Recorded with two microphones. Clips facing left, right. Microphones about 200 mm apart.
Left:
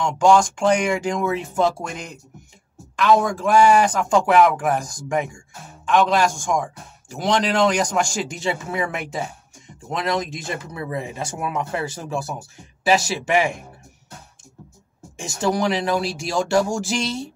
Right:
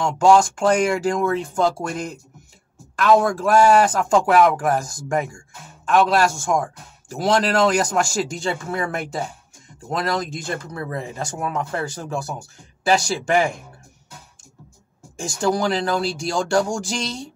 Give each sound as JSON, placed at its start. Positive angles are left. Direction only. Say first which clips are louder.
{"t": 0.0, "sound": "speech", "louder": "right 1 dB", "side_deg": 0}
{"t": 10.5, "sound": "speech", "louder": "right 2 dB", "side_deg": 20}
{"t": 10.8, "sound": "speech", "louder": "even", "side_deg": 0}
{"t": 15.4, "sound": "speech", "louder": "even", "side_deg": 0}